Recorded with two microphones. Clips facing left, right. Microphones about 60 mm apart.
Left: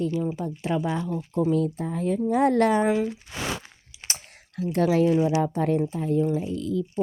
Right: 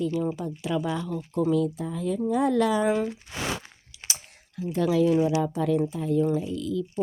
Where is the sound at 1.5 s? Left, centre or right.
Left.